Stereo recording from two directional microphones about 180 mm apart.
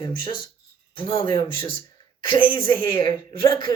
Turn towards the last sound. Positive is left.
turn(degrees=25)  # may be behind; listen again after turning